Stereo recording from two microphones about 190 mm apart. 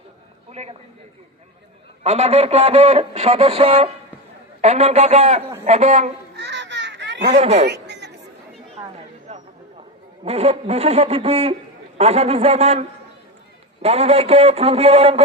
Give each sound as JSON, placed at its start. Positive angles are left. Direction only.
{"t": 0.5, "sound": "a man's voice", "side_deg": -35}
{"t": 2.0, "sound": "a man's voice", "side_deg": -35}
{"t": 6.3, "sound": "babbling", "side_deg": -65}
{"t": 7.3, "sound": "a man's voice", "side_deg": -35}
{"t": 7.7, "sound": "chatter", "side_deg": -65}
{"t": 9.3, "sound": "a sound", "side_deg": -35}
{"t": 10.2, "sound": "a man's voice", "side_deg": -35}
{"t": 13.8, "sound": "a man's voice", "side_deg": -35}